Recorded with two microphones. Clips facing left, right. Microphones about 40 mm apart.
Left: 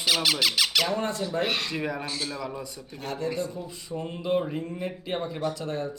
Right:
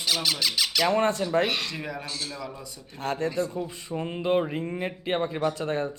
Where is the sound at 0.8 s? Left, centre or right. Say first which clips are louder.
Right 5 dB; right.